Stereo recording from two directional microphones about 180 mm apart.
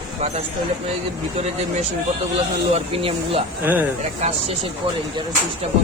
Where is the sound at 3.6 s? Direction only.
10° right (ahead or behind).